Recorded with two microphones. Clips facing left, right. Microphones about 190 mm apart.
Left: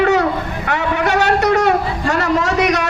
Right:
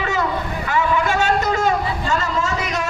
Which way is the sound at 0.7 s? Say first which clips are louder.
Left 2 dB; 65° left (ahead or behind).